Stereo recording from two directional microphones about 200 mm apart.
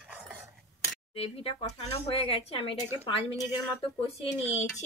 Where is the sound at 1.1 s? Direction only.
30° left (ahead or behind).